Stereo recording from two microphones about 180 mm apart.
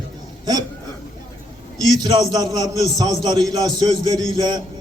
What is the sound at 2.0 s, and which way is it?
A man's voice, 20° right (ahead or behind).